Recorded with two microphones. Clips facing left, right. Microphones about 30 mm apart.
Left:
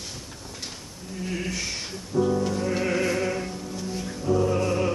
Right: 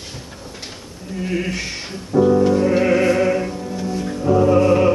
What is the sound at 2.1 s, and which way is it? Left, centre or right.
Music, right.